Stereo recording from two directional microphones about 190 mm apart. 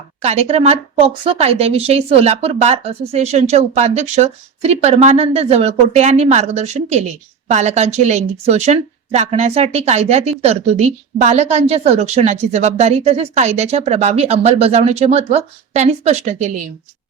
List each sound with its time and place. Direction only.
0.2 s speech: 35° right (ahead or behind)